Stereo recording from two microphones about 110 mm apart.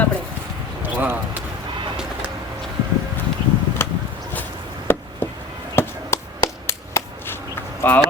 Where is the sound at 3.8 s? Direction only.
20° left (ahead or behind).